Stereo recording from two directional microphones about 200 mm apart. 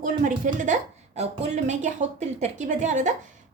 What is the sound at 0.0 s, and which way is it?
A woman's voice, 40° right (ahead or behind).